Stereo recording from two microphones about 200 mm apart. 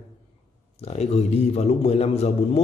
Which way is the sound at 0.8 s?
30° left (ahead or behind).